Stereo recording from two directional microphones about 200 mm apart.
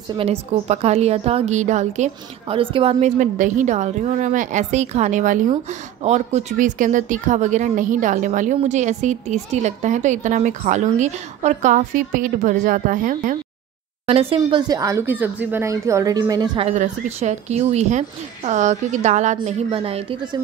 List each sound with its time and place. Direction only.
0.1 s a woman's voice: 30° right (ahead or behind)
14.0 s speech: 30° right (ahead or behind)